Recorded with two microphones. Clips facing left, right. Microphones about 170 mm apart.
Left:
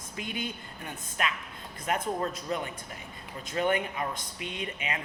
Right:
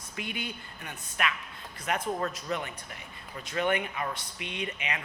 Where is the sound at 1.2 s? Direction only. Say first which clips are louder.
Right 1 dB; 35° left (ahead or behind).